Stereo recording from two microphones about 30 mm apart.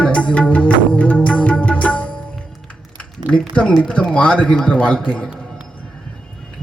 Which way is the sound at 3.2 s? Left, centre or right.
Right.